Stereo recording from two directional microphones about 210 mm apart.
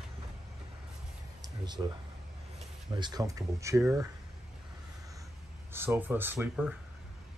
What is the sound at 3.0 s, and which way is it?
Speech, 15° right (ahead or behind).